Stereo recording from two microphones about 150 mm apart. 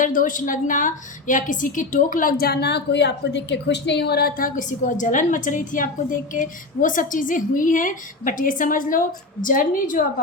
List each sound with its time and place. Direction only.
0.0 s a woman's voice: 60° left (ahead or behind)